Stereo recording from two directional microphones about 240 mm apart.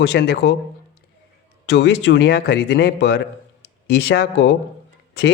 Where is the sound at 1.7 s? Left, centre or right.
Left.